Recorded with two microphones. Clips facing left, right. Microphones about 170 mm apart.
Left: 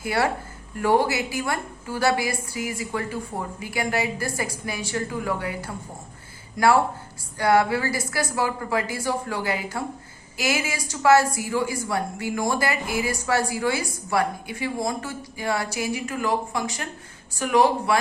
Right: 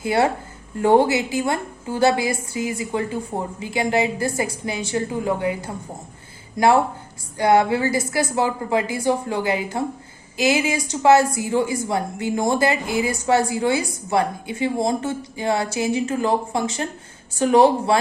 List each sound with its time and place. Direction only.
0.0 s a woman's voice: 20° right (ahead or behind)